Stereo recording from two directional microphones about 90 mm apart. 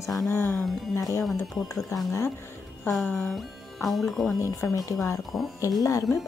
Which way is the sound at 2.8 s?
Centre (ahead or behind).